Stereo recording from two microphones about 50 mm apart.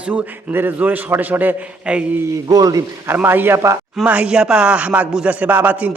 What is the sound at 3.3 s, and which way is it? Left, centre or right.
Speech, right.